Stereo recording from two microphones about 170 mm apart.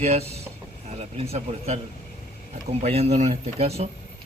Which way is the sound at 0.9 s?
35° right (ahead or behind).